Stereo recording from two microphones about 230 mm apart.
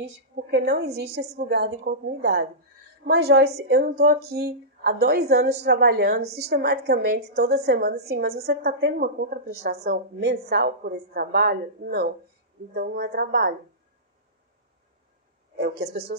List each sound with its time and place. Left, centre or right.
0.3 s a sound: right
0.7 s a woman's voice: right
15.5 s speech: right